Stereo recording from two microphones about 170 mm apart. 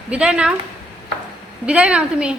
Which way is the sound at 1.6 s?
5° right (ahead or behind).